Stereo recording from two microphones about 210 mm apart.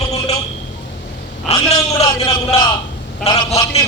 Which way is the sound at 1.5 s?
30° left (ahead or behind).